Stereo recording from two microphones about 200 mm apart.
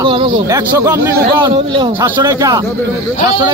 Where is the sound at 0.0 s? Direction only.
25° right (ahead or behind).